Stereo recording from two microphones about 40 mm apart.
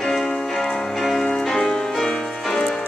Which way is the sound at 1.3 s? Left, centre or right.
Centre.